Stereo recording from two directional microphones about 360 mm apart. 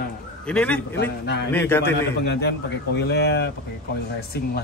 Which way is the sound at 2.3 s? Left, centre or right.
Left.